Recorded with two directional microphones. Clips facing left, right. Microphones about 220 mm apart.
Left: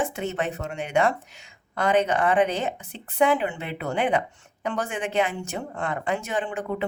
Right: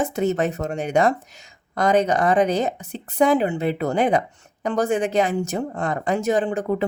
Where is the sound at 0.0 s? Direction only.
40° right (ahead or behind).